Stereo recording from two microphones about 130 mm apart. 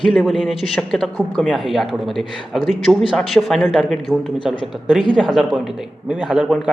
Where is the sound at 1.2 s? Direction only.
10° left (ahead or behind).